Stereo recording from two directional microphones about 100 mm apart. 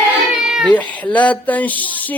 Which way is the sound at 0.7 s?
15° left (ahead or behind).